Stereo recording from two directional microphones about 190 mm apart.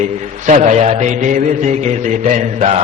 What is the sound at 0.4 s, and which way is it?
A man's voice, 40° right (ahead or behind).